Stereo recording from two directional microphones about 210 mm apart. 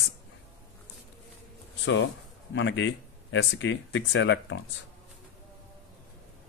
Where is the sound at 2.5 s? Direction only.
60° left (ahead or behind).